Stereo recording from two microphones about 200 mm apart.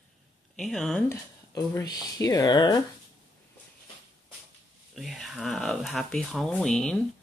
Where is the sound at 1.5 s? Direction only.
20° left (ahead or behind).